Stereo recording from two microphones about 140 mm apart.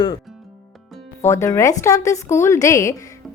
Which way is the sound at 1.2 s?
20° left (ahead or behind).